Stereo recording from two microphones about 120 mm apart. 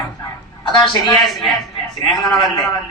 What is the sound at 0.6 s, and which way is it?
Speech, 35° left (ahead or behind).